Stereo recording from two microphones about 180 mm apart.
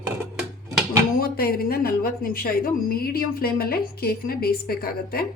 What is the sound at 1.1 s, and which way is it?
Speech, 55° left (ahead or behind).